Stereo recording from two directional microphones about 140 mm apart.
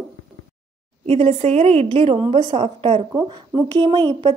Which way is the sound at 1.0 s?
45° right (ahead or behind).